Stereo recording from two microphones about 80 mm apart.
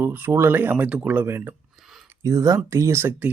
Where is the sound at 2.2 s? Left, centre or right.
Right.